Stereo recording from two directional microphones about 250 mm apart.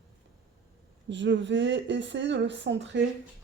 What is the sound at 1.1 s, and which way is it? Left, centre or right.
Speech, right.